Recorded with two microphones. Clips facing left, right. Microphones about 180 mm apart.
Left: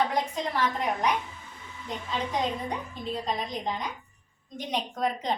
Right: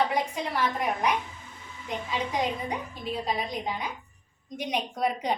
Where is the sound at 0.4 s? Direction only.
10° right (ahead or behind).